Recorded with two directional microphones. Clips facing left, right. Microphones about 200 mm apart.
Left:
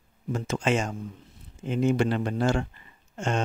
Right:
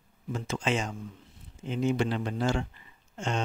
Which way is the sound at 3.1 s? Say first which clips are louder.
Left 4 dB; 50° left (ahead or behind).